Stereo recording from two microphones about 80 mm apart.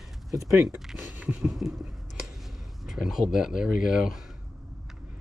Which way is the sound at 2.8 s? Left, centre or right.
Centre.